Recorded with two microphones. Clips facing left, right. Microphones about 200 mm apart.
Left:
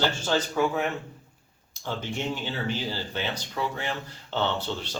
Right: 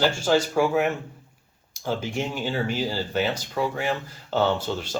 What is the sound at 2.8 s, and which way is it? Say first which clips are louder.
Speech: right 6 dB; 45° right (ahead or behind).